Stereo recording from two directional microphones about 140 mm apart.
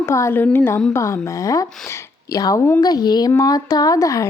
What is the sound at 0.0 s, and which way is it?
A woman's voice, 20° left (ahead or behind).